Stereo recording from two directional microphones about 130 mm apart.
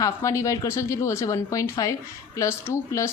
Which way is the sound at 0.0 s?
25° left (ahead or behind).